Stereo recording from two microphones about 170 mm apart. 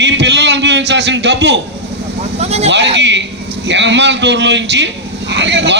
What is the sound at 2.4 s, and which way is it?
Vehicle, 40° right (ahead or behind).